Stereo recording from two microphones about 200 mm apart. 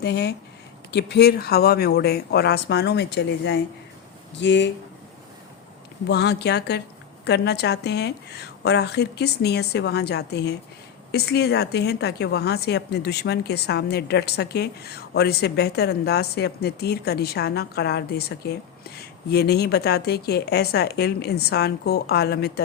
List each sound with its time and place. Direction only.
0.0 s a woman's voice: 55° left (ahead or behind)
6.1 s a woman's voice: 55° left (ahead or behind)